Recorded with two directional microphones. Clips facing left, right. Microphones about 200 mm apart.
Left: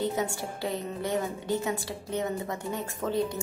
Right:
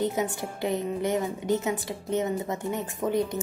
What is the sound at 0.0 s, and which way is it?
A woman's voice, 20° right (ahead or behind).